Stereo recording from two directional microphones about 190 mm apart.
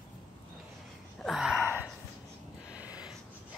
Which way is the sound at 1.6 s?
10° right (ahead or behind).